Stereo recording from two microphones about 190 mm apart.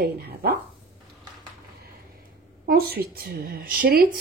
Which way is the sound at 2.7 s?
50° right (ahead or behind).